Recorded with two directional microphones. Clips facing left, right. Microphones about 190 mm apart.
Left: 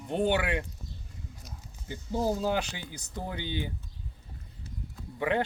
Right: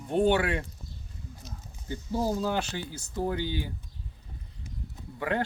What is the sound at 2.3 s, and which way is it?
Speech, 15° left (ahead or behind).